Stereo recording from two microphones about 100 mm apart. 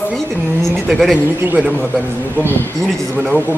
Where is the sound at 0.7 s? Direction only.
Centre (ahead or behind).